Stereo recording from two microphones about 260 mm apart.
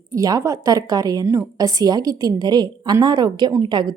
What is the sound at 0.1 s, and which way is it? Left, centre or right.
A woman's voice, centre.